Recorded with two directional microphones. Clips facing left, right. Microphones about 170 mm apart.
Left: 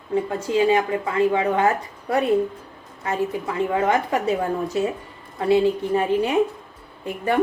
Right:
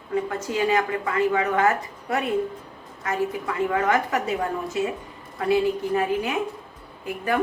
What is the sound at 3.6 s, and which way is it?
Speech, 25° left (ahead or behind).